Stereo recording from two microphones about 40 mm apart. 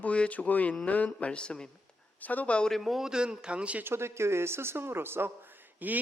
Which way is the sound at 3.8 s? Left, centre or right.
Right.